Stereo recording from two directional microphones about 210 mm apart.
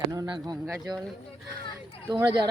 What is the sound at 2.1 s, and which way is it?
Speech, 20° right (ahead or behind).